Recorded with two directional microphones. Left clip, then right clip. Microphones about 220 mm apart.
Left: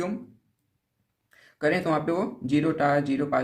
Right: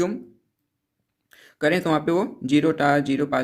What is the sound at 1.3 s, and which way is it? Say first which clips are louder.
Speech: right 3 dB; 40° right (ahead or behind).